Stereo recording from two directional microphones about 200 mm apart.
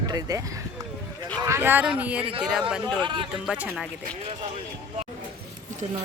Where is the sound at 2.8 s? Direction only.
25° right (ahead or behind).